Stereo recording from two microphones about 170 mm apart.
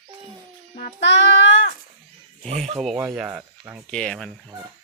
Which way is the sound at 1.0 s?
90° left.